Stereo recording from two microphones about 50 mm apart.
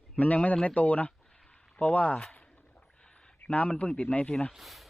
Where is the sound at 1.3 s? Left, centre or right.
Centre.